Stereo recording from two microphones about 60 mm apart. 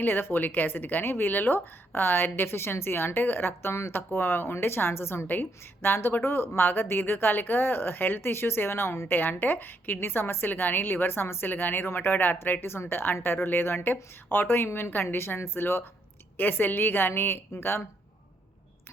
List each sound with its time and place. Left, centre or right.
0.0 s a woman's voice: left